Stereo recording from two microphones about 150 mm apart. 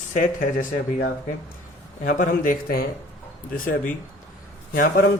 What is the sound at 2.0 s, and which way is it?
Speech, 65° left (ahead or behind).